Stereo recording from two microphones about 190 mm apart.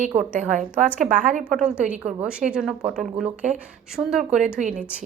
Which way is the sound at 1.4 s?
Centre (ahead or behind).